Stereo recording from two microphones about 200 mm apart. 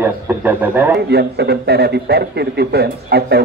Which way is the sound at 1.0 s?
55° right (ahead or behind).